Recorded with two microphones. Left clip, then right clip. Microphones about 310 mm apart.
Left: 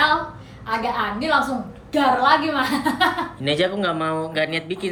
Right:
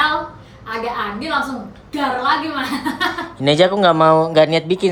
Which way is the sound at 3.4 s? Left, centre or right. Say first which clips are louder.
Right 9 dB; centre.